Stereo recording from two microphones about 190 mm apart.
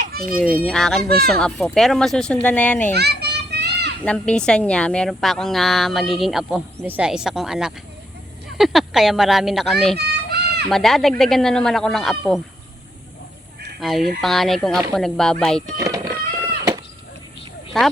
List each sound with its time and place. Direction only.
0.0 s a sound: 50° right (ahead or behind)
0.5 s a woman's voice: 5° left (ahead or behind)
2.9 s children playing: 60° right (ahead or behind)
4.0 s a woman's voice: 5° left (ahead or behind)
10.0 s children playing: 60° right (ahead or behind)
10.7 s a woman's voice: centre (ahead or behind)
13.7 s a woman's voice: centre (ahead or behind)
15.8 s music: 15° right (ahead or behind)
17.7 s a woman's voice: centre (ahead or behind)